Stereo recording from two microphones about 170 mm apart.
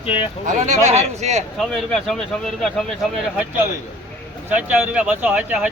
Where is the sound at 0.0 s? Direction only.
30° left (ahead or behind).